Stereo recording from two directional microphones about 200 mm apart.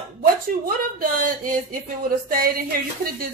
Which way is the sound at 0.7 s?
45° right (ahead or behind).